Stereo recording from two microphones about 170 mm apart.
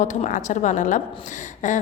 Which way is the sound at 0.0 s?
45° left (ahead or behind).